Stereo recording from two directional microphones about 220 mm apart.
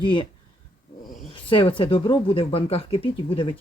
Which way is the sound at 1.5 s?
25° left (ahead or behind).